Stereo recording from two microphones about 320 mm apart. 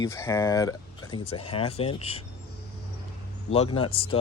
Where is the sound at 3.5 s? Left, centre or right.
Centre.